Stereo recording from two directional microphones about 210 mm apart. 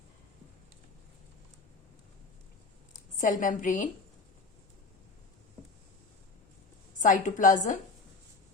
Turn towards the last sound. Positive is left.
turn(degrees=35)  # may be behind; listen again after turning